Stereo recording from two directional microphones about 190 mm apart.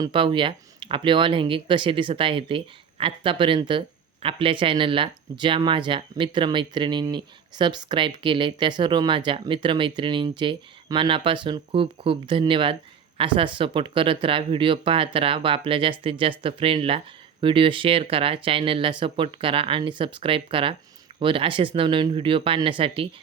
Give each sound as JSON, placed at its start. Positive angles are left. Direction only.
{"t": 0.0, "sound": "speech", "side_deg": -25}